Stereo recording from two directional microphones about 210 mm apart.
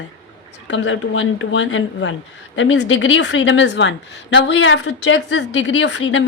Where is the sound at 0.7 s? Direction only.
65° left (ahead or behind).